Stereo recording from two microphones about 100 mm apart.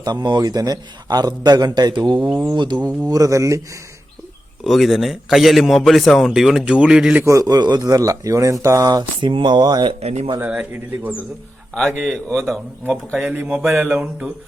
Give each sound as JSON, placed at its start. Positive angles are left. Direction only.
{"t": 0.0, "sound": "a man's voice", "side_deg": -45}
{"t": 4.6, "sound": "a man's voice", "side_deg": 0}
{"t": 7.3, "sound": "speech", "side_deg": -40}
{"t": 9.3, "sound": "a man's voice", "side_deg": -50}
{"t": 10.0, "sound": "speech", "side_deg": -90}
{"t": 11.7, "sound": "a man's voice", "side_deg": 5}
{"t": 13.3, "sound": "mantra", "side_deg": -15}